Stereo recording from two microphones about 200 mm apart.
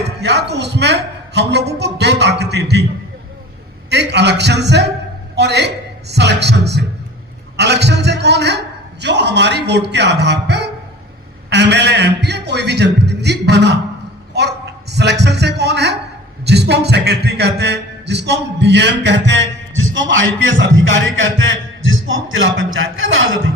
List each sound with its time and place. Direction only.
0.0 s a man's voice: 60° right (ahead or behind)
3.8 s a man's voice: 60° right (ahead or behind); by 23.4 s 75° right (ahead or behind)